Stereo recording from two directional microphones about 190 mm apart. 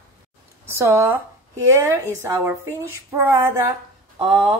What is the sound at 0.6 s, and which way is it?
A woman's voice, 15° right (ahead or behind).